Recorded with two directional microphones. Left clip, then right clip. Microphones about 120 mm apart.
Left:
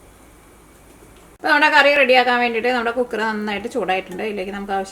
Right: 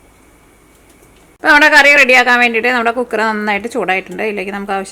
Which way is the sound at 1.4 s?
40° right (ahead or behind).